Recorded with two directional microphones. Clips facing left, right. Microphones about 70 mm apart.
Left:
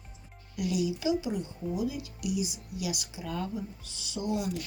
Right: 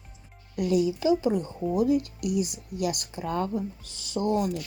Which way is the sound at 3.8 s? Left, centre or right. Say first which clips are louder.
Even; left.